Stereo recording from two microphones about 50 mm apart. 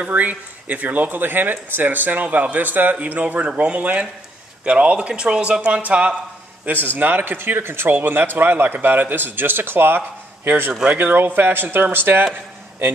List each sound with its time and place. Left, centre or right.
0.0 s speech: right
6.6 s a man's voice: right